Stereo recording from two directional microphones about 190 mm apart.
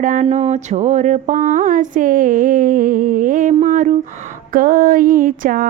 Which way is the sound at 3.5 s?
35° right (ahead or behind).